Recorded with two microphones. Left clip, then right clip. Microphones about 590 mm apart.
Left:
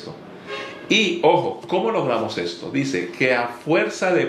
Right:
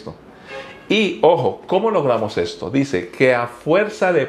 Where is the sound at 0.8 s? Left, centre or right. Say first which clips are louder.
Right 3 dB; right.